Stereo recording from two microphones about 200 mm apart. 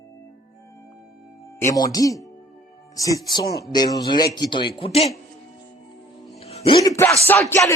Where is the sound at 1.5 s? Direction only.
15° left (ahead or behind).